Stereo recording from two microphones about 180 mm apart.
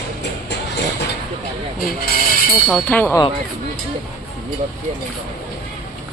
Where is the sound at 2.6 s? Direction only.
5° left (ahead or behind).